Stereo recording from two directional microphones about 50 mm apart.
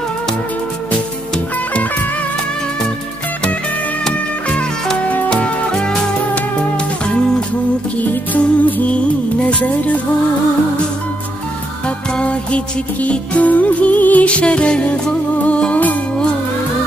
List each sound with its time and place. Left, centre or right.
5.3 s music: centre
8.0 s music: left
12.2 s music: left